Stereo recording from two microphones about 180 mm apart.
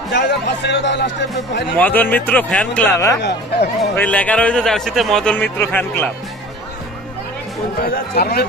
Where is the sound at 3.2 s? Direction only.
70° left (ahead or behind).